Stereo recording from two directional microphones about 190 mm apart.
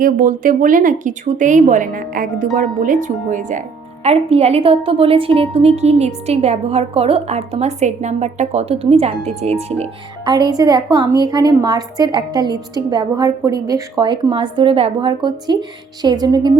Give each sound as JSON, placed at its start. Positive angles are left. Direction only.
{"t": 0.0, "sound": "a woman's voice", "side_deg": -45}